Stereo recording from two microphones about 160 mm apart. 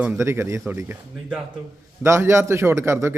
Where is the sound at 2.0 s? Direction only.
15° right (ahead or behind).